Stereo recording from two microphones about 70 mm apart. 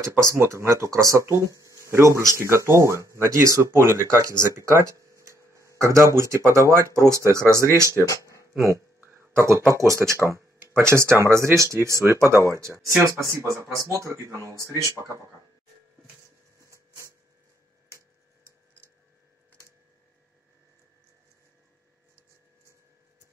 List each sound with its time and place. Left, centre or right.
0.2 s speech: right
5.1 s tick-tock: right
5.8 s speech: right
8.0 s speech: left
8.5 s speech: right
9.0 s a sound: right
10.9 s speech: right
14.7 s speech: left
16.7 s a sound: right